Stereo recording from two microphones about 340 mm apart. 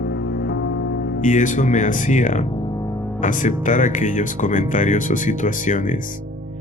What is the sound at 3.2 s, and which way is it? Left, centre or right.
Speech, left.